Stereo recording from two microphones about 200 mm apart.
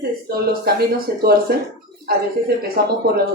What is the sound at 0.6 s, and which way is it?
Speech, 50° right (ahead or behind).